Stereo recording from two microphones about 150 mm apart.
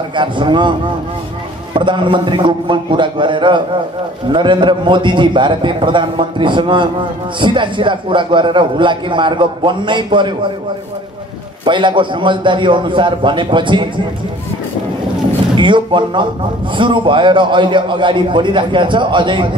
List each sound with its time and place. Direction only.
0.1 s a man's voice: 30° right (ahead or behind)
11.6 s a man's voice: 30° right (ahead or behind)
15.5 s a man's voice: 30° right (ahead or behind)